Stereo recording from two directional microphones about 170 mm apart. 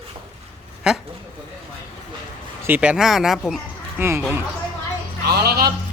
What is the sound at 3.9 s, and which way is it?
Speech, 15° right (ahead or behind).